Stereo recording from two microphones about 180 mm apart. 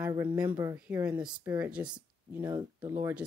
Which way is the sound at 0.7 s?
10° right (ahead or behind).